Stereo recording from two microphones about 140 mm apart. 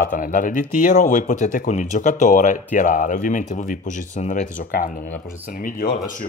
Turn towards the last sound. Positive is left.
turn(degrees=85)